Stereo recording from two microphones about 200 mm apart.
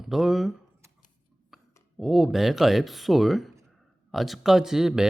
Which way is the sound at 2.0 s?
Centre (ahead or behind).